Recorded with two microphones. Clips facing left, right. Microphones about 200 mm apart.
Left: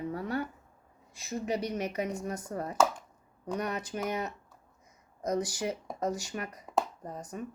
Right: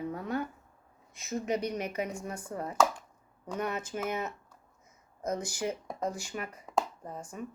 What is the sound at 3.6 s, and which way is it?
Speech, 35° left (ahead or behind).